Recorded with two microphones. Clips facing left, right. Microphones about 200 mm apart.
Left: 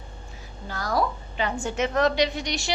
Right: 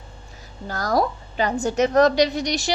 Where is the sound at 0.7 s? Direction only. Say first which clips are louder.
Right 4 dB; 40° right (ahead or behind).